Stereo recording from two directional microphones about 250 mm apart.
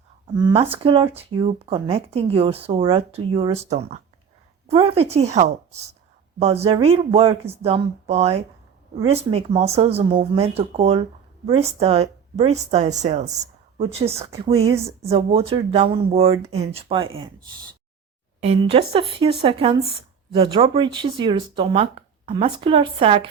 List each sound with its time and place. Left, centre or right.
0.3 s speech: centre
18.6 s speech: right